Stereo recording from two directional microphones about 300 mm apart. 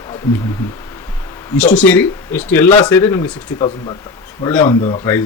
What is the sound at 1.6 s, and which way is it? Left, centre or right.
Speech, centre.